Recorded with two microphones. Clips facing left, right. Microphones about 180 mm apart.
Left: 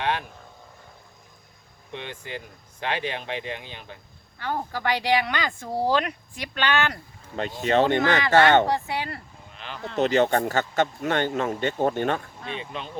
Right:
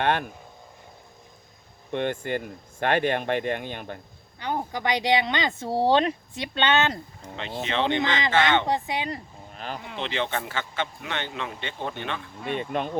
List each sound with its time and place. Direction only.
0.0 s speech: 50° right (ahead or behind)
1.9 s speech: 50° right (ahead or behind)
4.4 s speech: 20° right (ahead or behind)
7.3 s speech: 45° left (ahead or behind)
8.6 s speech: 20° right (ahead or behind)
9.5 s speech: 45° right (ahead or behind)
10.0 s speech: 45° left (ahead or behind)
12.5 s speech: 55° right (ahead or behind)